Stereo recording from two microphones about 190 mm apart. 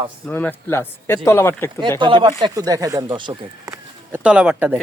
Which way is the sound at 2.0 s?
25° right (ahead or behind).